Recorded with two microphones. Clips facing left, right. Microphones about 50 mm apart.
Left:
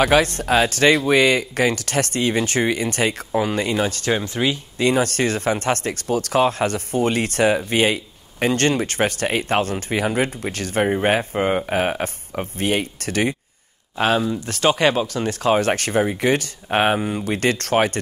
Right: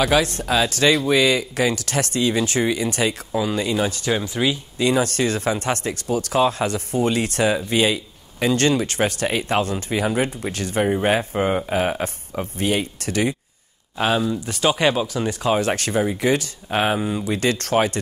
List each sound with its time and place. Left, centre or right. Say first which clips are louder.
0.0 s speech: left 2 dB; left
4.4 s speech: right 1 dB; centre
4.7 s speech: left 1 dB; left
14.4 s speech: left 1 dB; left